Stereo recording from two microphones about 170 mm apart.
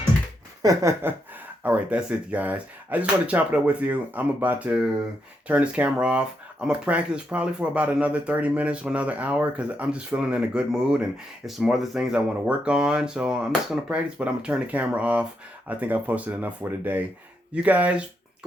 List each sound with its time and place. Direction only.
0.6 s speech: 20° right (ahead or behind)
1.6 s speech: 10° right (ahead or behind)